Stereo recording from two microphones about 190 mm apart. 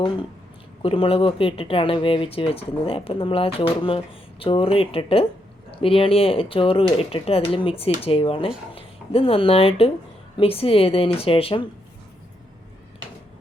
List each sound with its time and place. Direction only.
0.8 s speech: 30° left (ahead or behind)